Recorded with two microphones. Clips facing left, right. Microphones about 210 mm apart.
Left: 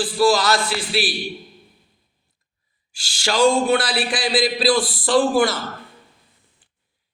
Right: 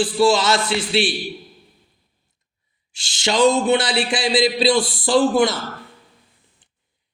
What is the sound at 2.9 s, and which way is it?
A man's voice, 25° right (ahead or behind).